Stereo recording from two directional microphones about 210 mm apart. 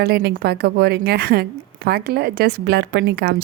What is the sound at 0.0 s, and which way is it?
Speech, 50° right (ahead or behind).